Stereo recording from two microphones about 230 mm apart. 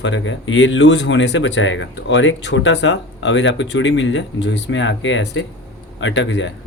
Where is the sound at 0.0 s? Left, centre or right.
Left.